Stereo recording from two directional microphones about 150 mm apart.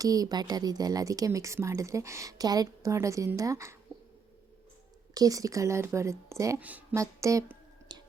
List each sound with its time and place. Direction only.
0.0 s speech: 25° right (ahead or behind)
5.1 s speech: 25° right (ahead or behind)
6.6 s a woman's voice: 10° right (ahead or behind)
6.9 s a sound: 20° right (ahead or behind)